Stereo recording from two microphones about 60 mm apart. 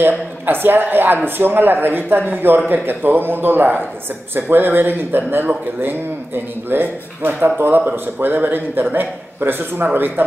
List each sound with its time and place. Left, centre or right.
0.5 s speech: right